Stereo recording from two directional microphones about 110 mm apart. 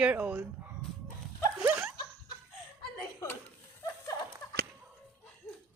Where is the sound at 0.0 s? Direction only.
10° right (ahead or behind).